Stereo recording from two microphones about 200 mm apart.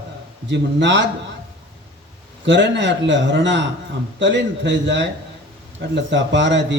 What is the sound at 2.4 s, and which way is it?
A man's voice, 65° right (ahead or behind).